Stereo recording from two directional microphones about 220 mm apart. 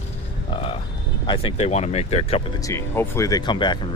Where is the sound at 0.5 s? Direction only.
25° left (ahead or behind).